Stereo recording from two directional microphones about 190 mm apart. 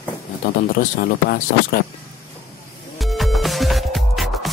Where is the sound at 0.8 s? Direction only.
50° left (ahead or behind).